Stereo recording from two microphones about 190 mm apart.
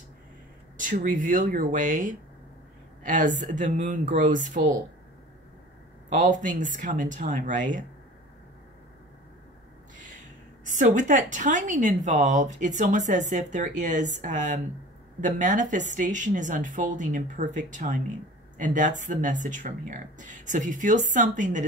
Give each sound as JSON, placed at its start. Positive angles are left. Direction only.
{"t": 0.7, "sound": "a woman's voice", "side_deg": -45}
{"t": 6.1, "sound": "speech", "side_deg": -45}
{"t": 10.6, "sound": "a woman's voice", "side_deg": -40}